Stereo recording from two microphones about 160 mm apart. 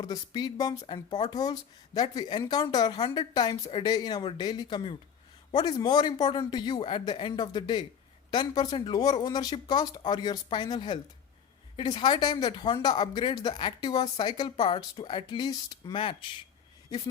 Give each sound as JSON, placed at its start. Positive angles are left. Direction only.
{"t": 0.0, "sound": "speech", "side_deg": 25}